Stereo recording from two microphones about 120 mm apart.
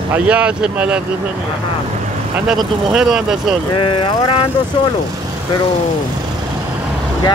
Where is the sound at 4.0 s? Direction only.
40° left (ahead or behind).